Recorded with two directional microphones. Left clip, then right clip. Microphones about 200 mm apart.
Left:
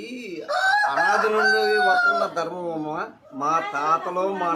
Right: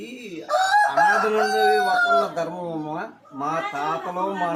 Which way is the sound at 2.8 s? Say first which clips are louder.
Left 1 dB; 25° left (ahead or behind).